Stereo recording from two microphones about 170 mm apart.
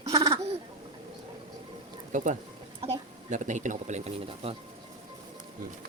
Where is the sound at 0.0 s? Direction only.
20° right (ahead or behind).